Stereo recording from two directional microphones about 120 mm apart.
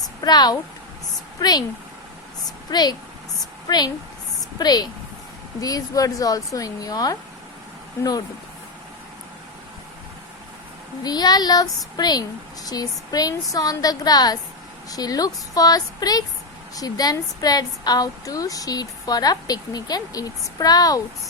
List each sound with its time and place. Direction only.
0.2 s a woman's voice: 35° left (ahead or behind)
2.6 s a woman's voice: 35° left (ahead or behind)
11.0 s a woman's voice: 35° left (ahead or behind)